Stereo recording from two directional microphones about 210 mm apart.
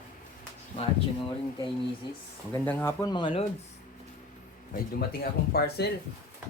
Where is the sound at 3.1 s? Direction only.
25° left (ahead or behind).